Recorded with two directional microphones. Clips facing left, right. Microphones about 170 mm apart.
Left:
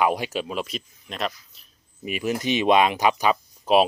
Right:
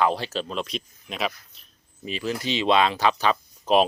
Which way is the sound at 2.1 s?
20° left (ahead or behind).